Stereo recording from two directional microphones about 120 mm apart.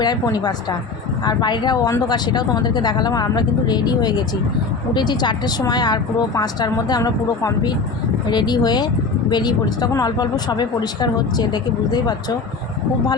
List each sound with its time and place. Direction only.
0.0 s speech: 35° left (ahead or behind)